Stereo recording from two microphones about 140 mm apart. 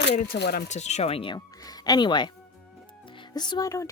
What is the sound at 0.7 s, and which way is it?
Speech, 55° left (ahead or behind).